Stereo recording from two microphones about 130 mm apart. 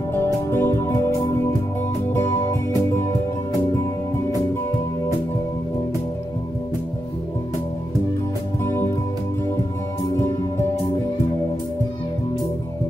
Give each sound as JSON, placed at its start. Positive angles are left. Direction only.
{"t": 0.1, "sound": "music", "side_deg": 20}
{"t": 8.6, "sound": "music", "side_deg": 20}